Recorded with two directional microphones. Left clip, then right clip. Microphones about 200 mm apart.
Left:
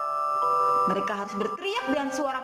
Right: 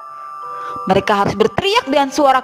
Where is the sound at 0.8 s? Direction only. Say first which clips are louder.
Right 12 dB; 50° right (ahead or behind).